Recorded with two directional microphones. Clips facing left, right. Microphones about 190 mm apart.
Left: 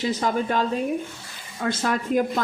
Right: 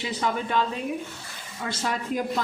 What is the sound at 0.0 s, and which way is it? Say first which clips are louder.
Speech: left 4 dB; 40° left (ahead or behind).